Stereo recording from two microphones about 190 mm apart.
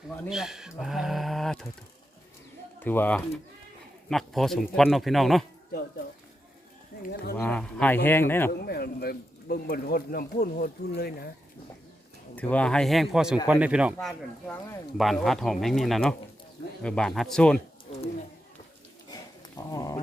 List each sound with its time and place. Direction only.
0.3 s speech: centre (ahead or behind)
2.8 s speech: 10° left (ahead or behind)
7.0 s speech: 55° left (ahead or behind)
7.3 s speech: 5° left (ahead or behind)
8.5 s speech: 55° left (ahead or behind)
12.4 s speech: 5° left (ahead or behind)
14.4 s speech: 15° left (ahead or behind)
14.9 s speech: centre (ahead or behind)
19.5 s a sound: 15° left (ahead or behind)